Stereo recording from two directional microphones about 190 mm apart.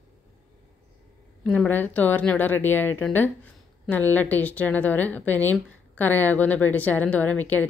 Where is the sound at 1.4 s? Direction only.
5° left (ahead or behind).